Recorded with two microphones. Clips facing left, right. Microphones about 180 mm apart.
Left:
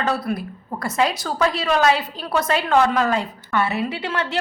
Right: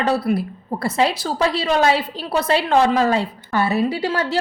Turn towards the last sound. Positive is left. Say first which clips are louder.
# right 4 dB
turn(degrees=-35)  # may be behind; listen again after turning